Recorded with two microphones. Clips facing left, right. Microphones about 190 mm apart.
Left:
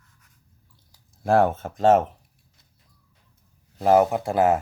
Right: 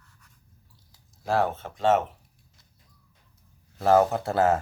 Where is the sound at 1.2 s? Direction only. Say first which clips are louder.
Left 6 dB; 50° left (ahead or behind).